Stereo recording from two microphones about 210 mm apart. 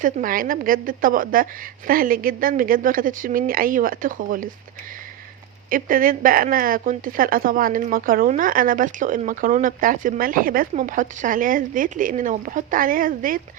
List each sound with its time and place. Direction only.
0.0 s speech: 40° right (ahead or behind)
5.6 s speech: 40° right (ahead or behind)